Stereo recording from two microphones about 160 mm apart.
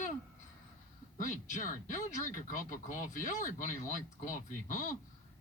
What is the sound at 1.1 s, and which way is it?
A woman's voice, 50° left (ahead or behind).